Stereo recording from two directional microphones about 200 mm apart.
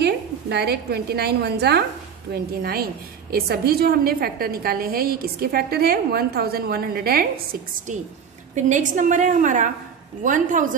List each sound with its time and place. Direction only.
0.0 s a woman's voice: 55° right (ahead or behind)